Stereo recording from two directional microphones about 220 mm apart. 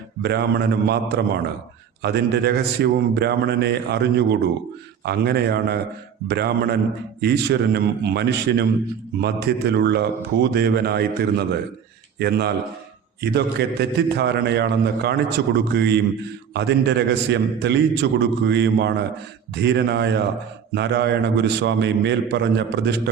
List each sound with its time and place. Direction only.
0.2 s a man's voice: 50° right (ahead or behind)